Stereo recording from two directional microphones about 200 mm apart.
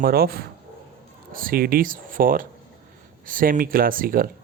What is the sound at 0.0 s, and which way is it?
Speech, 50° right (ahead or behind).